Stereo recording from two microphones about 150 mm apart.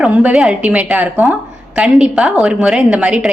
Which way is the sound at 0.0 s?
10° right (ahead or behind).